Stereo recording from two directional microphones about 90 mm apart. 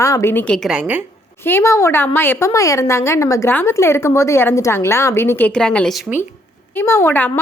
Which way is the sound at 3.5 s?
25° left (ahead or behind).